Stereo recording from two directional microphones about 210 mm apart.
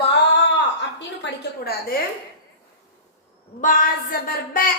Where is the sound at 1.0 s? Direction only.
50° left (ahead or behind).